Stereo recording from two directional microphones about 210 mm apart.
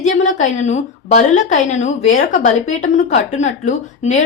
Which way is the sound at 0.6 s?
35° left (ahead or behind).